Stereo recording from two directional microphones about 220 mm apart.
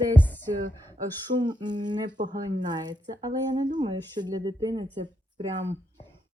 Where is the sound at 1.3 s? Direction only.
20° right (ahead or behind).